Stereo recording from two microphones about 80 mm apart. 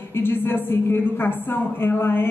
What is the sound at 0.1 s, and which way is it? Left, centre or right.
A woman's voice, left.